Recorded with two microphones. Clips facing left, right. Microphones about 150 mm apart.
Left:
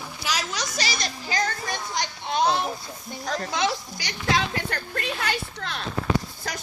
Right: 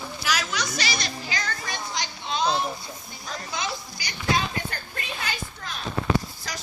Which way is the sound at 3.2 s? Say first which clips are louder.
Left 7 dB; 75° left (ahead or behind).